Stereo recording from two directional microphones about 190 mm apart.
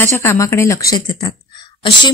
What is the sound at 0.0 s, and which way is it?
A woman's voice, 15° left (ahead or behind).